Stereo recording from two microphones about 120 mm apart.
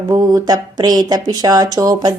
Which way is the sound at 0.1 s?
30° right (ahead or behind).